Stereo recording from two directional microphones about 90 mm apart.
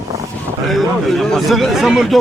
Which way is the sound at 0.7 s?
5° left (ahead or behind).